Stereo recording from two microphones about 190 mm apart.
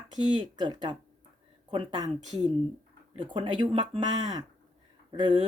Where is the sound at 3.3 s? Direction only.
25° right (ahead or behind).